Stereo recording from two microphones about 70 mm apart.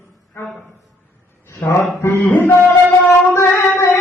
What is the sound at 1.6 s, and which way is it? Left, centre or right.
Speech, left.